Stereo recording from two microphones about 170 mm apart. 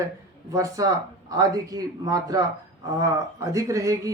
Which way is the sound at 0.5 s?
20° right (ahead or behind).